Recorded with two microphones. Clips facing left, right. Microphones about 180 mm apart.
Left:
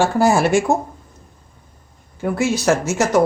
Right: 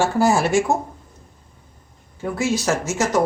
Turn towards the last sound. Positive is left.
turn(degrees=65)  # may be behind; listen again after turning